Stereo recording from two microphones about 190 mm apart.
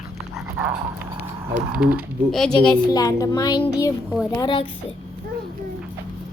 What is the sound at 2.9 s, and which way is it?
Speech, 20° left (ahead or behind).